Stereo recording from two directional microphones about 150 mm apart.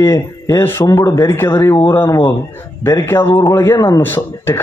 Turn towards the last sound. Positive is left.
turn(degrees=15)  # may be behind; listen again after turning